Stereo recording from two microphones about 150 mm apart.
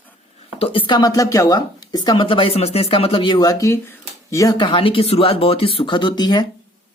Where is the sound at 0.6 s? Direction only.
35° left (ahead or behind).